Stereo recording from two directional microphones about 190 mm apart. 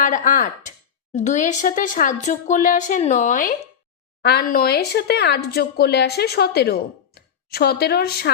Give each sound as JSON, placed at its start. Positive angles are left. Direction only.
{"t": 0.0, "sound": "speech", "side_deg": 45}
{"t": 4.2, "sound": "speech", "side_deg": 55}